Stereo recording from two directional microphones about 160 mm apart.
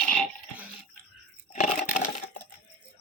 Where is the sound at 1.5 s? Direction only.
50° left (ahead or behind).